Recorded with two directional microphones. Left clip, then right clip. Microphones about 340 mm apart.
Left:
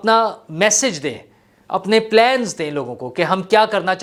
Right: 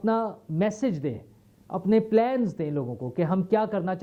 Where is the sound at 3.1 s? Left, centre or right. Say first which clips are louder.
Left 11 dB; centre.